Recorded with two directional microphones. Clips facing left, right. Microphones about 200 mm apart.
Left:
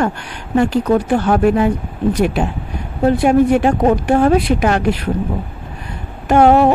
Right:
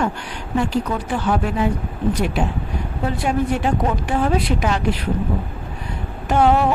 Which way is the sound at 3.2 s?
60° left (ahead or behind).